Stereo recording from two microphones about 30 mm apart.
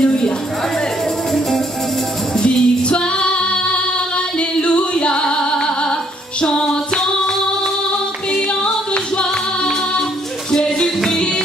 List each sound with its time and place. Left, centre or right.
0.0 s a sound: left
2.3 s music: left
2.8 s female singing: left
4.4 s singing: left
5.4 s music: left
8.3 s music: left
10.5 s music: left